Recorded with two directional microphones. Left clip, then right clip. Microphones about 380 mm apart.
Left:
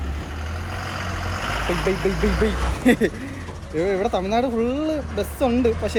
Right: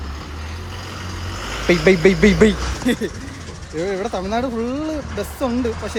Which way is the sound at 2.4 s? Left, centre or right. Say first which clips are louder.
Right 8 dB; right.